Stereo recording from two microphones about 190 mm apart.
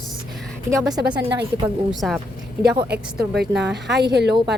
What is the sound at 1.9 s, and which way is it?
Speech, centre (ahead or behind).